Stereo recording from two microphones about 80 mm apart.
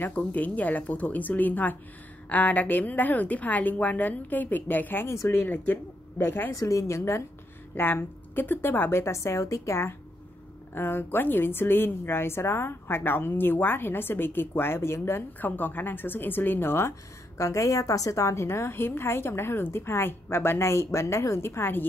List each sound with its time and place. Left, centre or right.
0.0 s a woman's voice: centre
6.5 s a woman's voice: left
17.4 s a woman's voice: left